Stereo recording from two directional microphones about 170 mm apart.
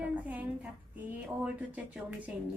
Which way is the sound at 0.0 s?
10° right (ahead or behind).